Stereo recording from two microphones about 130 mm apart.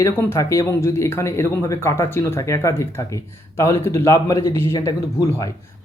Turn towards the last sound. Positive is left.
turn(degrees=25)  # may be behind; listen again after turning